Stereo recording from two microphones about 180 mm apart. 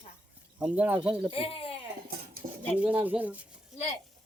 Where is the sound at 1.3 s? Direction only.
30° left (ahead or behind).